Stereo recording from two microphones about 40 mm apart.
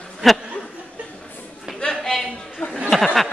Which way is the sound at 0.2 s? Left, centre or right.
Centre.